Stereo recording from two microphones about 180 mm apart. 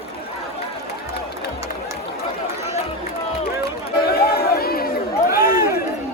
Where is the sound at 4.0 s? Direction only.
60° left (ahead or behind).